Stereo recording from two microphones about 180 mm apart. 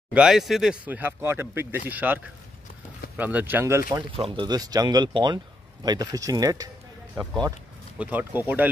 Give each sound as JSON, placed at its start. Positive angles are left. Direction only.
{"t": 0.1, "sound": "speech", "side_deg": -5}
{"t": 3.2, "sound": "speech", "side_deg": -10}
{"t": 3.9, "sound": "speech", "side_deg": -25}
{"t": 8.0, "sound": "speech", "side_deg": -10}